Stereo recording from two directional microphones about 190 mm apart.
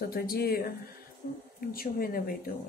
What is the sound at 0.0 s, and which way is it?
Speech, 50° left (ahead or behind).